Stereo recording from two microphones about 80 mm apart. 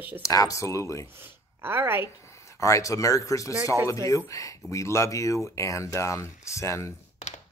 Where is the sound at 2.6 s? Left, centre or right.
Left.